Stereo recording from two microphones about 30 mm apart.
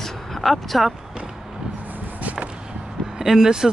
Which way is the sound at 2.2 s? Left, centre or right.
Right.